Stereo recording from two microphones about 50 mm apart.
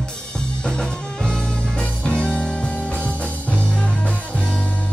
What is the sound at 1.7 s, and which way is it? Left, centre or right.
Music, centre.